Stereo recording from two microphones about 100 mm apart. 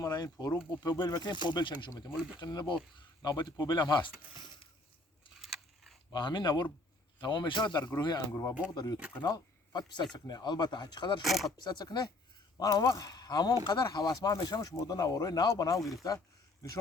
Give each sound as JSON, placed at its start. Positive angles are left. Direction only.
{"t": 0.0, "sound": "speech", "side_deg": 40}
{"t": 5.3, "sound": "a sound", "side_deg": -5}
{"t": 6.1, "sound": "speech", "side_deg": 50}
{"t": 8.3, "sound": "speech", "side_deg": 30}
{"t": 8.7, "sound": "speech", "side_deg": 45}
{"t": 11.2, "sound": "speech", "side_deg": 0}
{"t": 11.5, "sound": "speech", "side_deg": 45}